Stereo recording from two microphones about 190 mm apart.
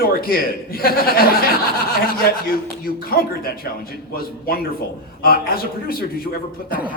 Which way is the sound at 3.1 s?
55° left (ahead or behind).